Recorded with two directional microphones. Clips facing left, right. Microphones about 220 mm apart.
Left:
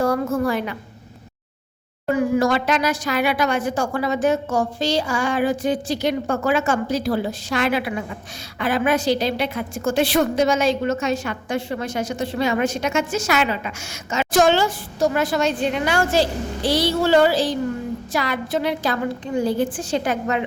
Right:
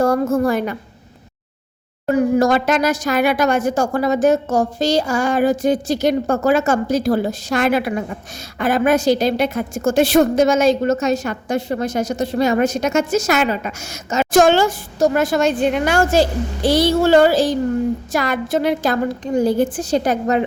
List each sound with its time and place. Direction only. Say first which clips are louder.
0.0 s a woman's voice: right 4 dB; 45° right (ahead or behind)
2.0 s a woman's voice: right 4 dB; 40° right (ahead or behind)